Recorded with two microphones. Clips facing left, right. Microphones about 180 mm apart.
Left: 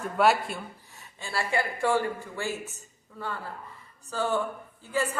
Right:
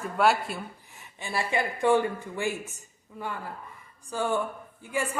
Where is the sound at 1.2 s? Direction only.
20° right (ahead or behind).